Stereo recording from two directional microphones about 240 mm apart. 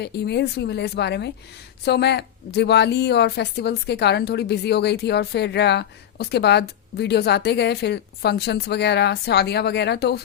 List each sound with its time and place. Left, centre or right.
0.0 s a woman's voice: left